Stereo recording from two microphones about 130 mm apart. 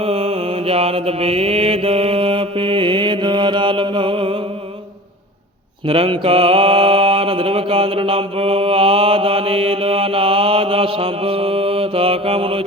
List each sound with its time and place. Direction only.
0.0 s mantra: 50° right (ahead or behind)
5.9 s mantra: 45° right (ahead or behind)